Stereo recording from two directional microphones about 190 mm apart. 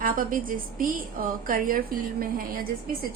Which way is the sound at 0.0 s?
45° right (ahead or behind).